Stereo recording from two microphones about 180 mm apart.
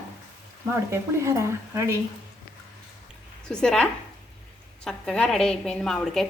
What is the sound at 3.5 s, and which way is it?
Speech, 5° left (ahead or behind).